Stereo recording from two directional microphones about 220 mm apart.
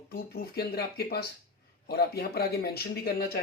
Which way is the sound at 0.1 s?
45° left (ahead or behind).